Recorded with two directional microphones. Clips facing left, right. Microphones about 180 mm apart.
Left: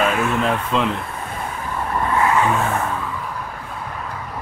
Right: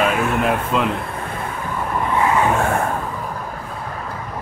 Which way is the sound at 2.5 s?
50° right (ahead or behind).